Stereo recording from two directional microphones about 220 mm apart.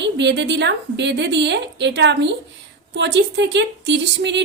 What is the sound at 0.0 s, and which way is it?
A woman's voice, 50° right (ahead or behind).